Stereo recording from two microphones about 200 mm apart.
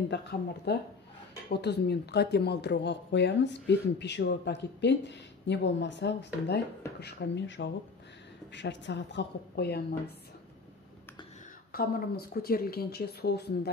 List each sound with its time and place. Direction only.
0.1 s speech: 55° left (ahead or behind)
11.7 s speech: 50° left (ahead or behind)